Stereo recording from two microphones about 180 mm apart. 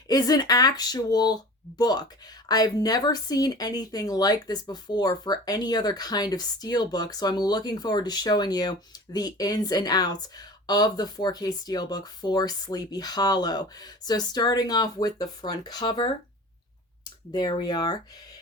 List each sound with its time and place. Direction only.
0.1 s speech: 20° left (ahead or behind)